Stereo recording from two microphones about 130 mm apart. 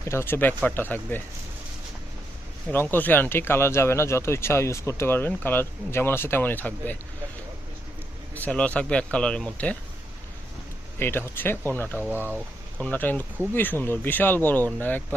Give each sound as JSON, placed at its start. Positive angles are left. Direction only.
{"t": 0.0, "sound": "speech", "side_deg": 20}
{"t": 2.7, "sound": "speech", "side_deg": 15}
{"t": 8.4, "sound": "speech", "side_deg": 10}
{"t": 11.0, "sound": "speech", "side_deg": 15}
{"t": 12.0, "sound": "speech", "side_deg": -15}
{"t": 12.8, "sound": "speech", "side_deg": 10}